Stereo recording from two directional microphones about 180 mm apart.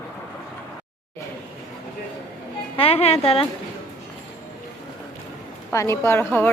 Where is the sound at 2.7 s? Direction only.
30° left (ahead or behind).